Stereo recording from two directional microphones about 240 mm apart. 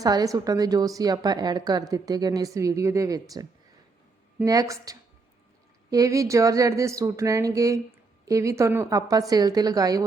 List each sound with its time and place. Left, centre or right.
0.0 s speech: centre